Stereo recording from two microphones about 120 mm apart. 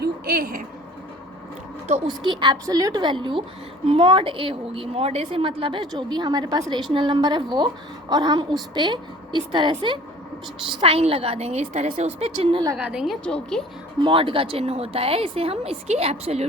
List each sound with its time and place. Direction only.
2.0 s a woman's voice: 40° right (ahead or behind)
10.8 s a woman's voice: 55° right (ahead or behind)
12.8 s a woman's voice: 5° right (ahead or behind)
13.2 s a woman's voice: 5° left (ahead or behind)
14.0 s a woman's voice: 45° right (ahead or behind)